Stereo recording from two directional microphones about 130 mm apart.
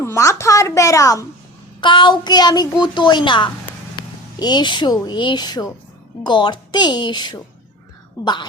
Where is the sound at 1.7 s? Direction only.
35° left (ahead or behind).